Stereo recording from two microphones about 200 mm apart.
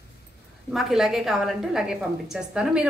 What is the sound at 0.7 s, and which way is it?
A woman's voice, centre (ahead or behind).